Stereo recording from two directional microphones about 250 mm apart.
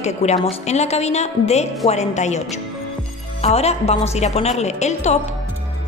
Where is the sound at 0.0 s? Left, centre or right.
Left.